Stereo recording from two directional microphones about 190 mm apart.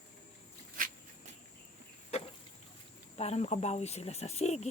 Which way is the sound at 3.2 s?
35° left (ahead or behind).